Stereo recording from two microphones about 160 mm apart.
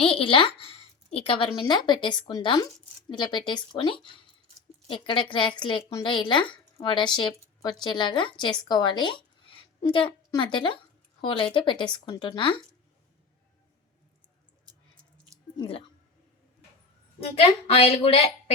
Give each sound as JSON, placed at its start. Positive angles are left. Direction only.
{"t": 0.0, "sound": "speech", "side_deg": 35}
{"t": 15.5, "sound": "speech", "side_deg": 30}
{"t": 17.2, "sound": "speech", "side_deg": 35}